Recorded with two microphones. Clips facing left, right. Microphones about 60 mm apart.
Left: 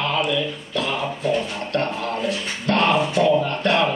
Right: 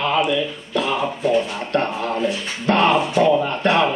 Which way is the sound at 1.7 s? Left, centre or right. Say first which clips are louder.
Right 3 dB; centre.